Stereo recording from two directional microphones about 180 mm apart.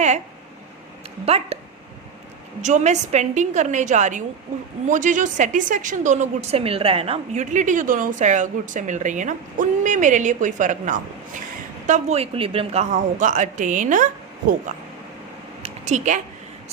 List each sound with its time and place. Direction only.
1.2 s a woman's voice: 35° right (ahead or behind)
2.6 s a woman's voice: 40° right (ahead or behind)
15.6 s a sound: 40° right (ahead or behind)